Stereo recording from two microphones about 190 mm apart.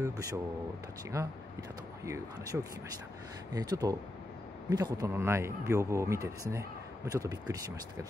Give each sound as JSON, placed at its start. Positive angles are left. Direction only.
{"t": 0.0, "sound": "speech", "side_deg": -15}
{"t": 2.0, "sound": "a man's voice", "side_deg": -15}